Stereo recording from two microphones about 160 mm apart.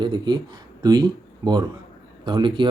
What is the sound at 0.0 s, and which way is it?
Speech, 30° right (ahead or behind).